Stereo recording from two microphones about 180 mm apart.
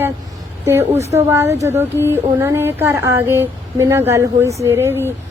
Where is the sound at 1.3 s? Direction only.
15° right (ahead or behind).